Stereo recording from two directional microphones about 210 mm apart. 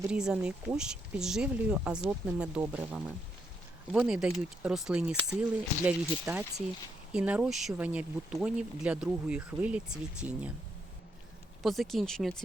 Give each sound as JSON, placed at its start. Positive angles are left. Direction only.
{"t": 0.0, "sound": "speech", "side_deg": -5}
{"t": 11.6, "sound": "speech", "side_deg": 0}